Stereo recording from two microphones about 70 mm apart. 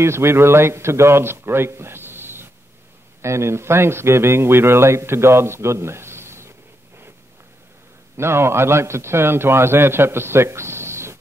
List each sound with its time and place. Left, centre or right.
0.0 s a man's voice: right
8.2 s a man's voice: right